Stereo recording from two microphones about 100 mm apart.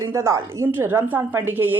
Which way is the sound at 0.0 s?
30° right (ahead or behind).